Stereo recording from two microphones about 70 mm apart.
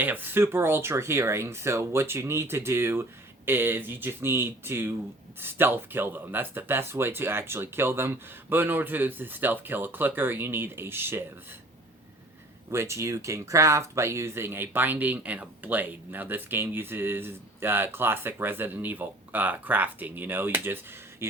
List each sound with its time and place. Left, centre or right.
0.0 s speech: right
12.7 s speech: right